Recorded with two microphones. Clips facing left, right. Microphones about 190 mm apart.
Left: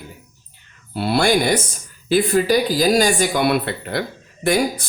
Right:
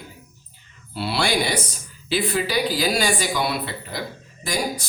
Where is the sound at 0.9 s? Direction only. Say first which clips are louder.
Left 6 dB; 50° left (ahead or behind).